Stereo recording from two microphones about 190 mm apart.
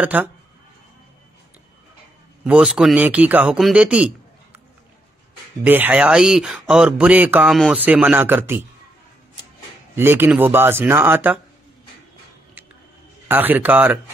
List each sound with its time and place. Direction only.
0.0 s speech: 10° right (ahead or behind)
2.4 s a man's voice: 5° right (ahead or behind)
5.6 s speech: 10° right (ahead or behind)
9.9 s speech: 10° right (ahead or behind)
13.3 s speech: 10° right (ahead or behind)